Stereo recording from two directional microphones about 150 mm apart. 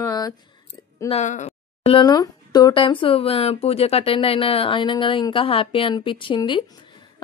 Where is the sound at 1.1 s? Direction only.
50° left (ahead or behind).